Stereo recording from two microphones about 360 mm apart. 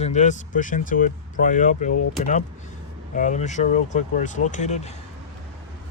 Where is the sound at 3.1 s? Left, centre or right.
Left.